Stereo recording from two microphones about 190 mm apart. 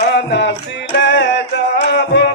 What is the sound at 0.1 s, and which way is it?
Music, 65° left (ahead or behind).